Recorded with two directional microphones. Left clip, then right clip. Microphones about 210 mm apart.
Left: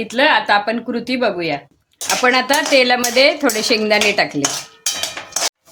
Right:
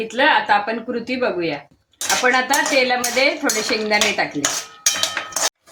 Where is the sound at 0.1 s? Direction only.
50° left (ahead or behind).